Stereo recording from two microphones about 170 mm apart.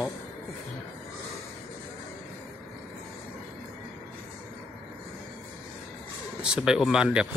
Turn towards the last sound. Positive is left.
turn(degrees=-5)  # may be behind; listen again after turning